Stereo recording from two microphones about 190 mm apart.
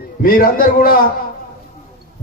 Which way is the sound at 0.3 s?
50° left (ahead or behind).